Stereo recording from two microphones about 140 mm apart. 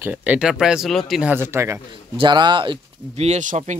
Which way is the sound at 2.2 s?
35° right (ahead or behind).